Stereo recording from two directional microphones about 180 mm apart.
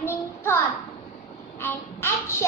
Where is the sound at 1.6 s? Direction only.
15° left (ahead or behind).